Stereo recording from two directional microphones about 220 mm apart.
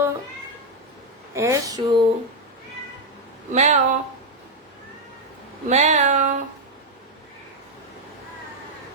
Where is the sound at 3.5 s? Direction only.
35° right (ahead or behind).